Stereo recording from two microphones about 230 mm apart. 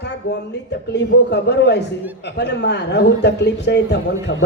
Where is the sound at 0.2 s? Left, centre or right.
Left.